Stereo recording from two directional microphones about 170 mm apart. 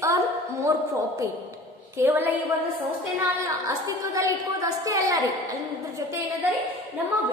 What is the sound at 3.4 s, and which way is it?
A woman's voice, 20° right (ahead or behind).